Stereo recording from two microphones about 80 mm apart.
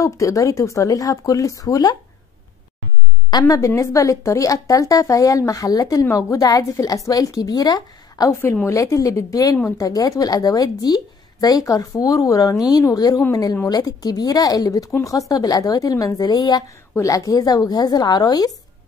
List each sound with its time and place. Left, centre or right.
0.0 s a woman's voice: left
3.3 s a woman's voice: left
6.0 s a woman's voice: left
8.3 s a woman's voice: left
17.0 s a woman's voice: left